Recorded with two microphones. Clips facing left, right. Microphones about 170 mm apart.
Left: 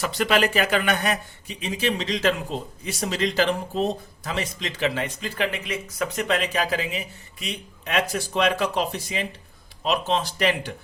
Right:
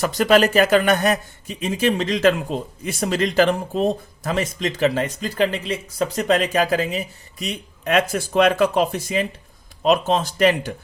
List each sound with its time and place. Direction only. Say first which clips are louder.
0.0 s speech: right 6 dB; 45° right (ahead or behind)